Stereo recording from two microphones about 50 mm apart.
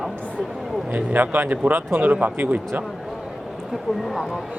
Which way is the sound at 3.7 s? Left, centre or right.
Centre.